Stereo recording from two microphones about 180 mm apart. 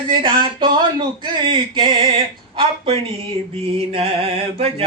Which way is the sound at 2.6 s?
30° right (ahead or behind).